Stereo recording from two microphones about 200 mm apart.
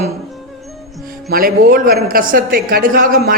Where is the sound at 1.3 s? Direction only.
45° right (ahead or behind).